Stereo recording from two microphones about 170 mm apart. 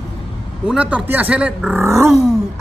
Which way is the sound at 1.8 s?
15° right (ahead or behind).